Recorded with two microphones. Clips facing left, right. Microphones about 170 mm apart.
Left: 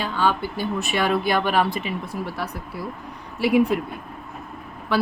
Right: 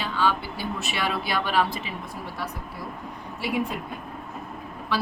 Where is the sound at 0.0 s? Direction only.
50° left (ahead or behind).